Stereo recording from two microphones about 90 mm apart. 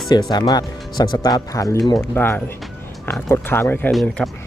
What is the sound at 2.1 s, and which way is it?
Speech, 25° left (ahead or behind).